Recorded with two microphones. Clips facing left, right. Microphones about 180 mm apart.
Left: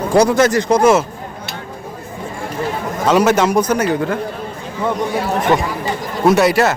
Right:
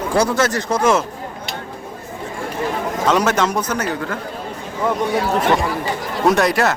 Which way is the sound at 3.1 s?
10° left (ahead or behind).